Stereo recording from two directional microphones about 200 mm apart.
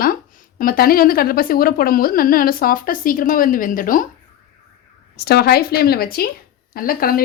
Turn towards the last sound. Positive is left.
turn(degrees=45)  # may be behind; listen again after turning